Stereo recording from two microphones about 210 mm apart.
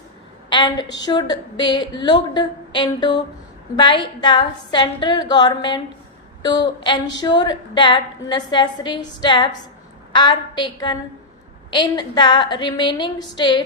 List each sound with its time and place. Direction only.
0.5 s a woman's voice: 20° left (ahead or behind)